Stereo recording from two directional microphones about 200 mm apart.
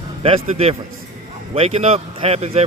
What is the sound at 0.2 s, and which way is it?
A man's voice, 30° right (ahead or behind).